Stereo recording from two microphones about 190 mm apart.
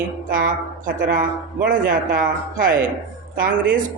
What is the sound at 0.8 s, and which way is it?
Speech, 45° right (ahead or behind).